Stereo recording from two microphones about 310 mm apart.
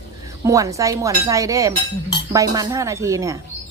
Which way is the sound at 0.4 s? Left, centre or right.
Centre.